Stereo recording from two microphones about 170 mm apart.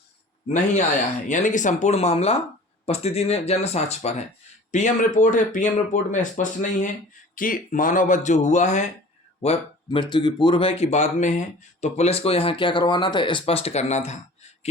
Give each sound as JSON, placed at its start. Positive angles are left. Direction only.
{"t": 1.3, "sound": "speech", "side_deg": 50}
{"t": 9.4, "sound": "speech", "side_deg": 35}